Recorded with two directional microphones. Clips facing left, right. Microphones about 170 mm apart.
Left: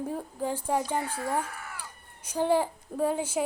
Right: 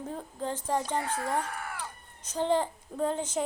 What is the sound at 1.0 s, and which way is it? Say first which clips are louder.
Speech: even; 55° right (ahead or behind).